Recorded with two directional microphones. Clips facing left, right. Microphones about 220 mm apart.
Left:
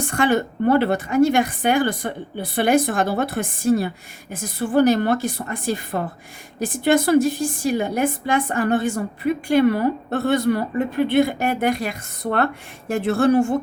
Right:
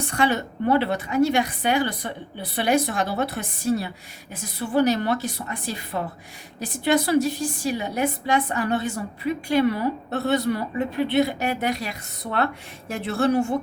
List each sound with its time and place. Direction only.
0.0 s a woman's voice: 50° left (ahead or behind)